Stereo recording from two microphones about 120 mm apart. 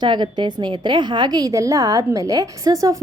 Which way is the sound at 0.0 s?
40° right (ahead or behind).